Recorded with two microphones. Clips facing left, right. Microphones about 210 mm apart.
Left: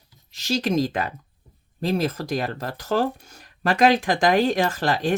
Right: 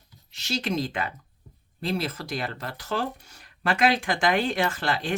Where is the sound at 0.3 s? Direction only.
40° left (ahead or behind).